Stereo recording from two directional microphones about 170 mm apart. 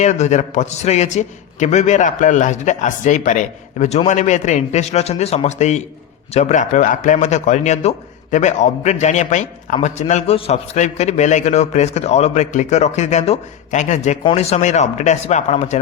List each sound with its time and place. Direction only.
0.0 s a man's voice: 40° left (ahead or behind)